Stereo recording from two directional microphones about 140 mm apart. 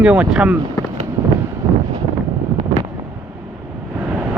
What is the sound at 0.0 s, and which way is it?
Speech, 5° right (ahead or behind).